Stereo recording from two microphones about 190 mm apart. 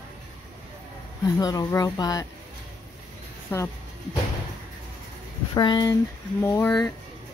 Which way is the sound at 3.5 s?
15° left (ahead or behind).